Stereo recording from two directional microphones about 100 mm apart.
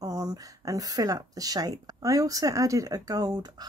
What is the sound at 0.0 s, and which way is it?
Speech, 35° right (ahead or behind).